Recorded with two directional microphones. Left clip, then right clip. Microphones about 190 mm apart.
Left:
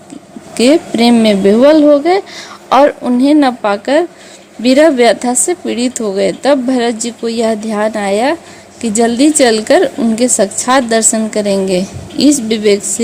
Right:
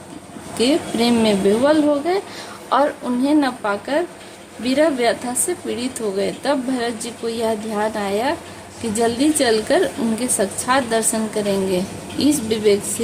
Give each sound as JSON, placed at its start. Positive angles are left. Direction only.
{"t": 0.5, "sound": "a woman's voice", "side_deg": 35}